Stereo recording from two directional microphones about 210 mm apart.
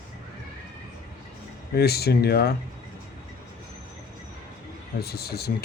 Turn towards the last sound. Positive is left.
turn(degrees=50)  # may be behind; listen again after turning